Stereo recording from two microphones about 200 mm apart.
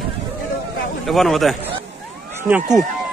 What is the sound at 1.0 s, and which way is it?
Speech, centre (ahead or behind).